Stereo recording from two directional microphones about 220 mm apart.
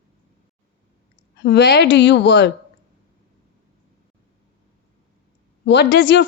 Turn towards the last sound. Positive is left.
turn(degrees=50)  # may be behind; listen again after turning